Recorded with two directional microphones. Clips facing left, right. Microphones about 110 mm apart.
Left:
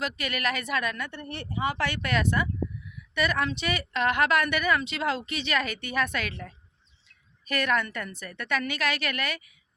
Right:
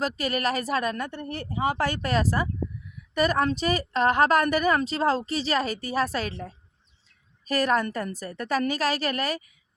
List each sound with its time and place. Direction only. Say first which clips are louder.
0.0 s a woman's voice: right 4 dB; 35° right (ahead or behind)